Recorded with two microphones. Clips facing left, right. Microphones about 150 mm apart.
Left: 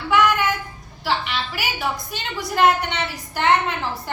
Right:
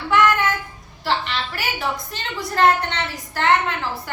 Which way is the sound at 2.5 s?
10° left (ahead or behind).